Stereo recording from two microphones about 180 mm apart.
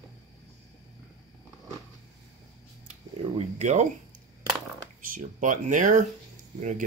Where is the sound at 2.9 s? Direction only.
40° right (ahead or behind).